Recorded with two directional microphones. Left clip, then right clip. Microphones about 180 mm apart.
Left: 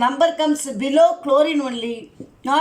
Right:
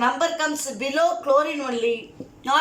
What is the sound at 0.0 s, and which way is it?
Speech, 35° left (ahead or behind).